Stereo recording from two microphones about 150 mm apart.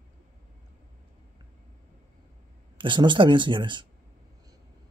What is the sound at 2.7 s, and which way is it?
Speech, 30° right (ahead or behind).